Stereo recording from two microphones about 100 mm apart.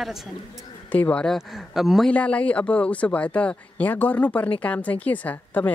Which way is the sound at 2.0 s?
15° left (ahead or behind).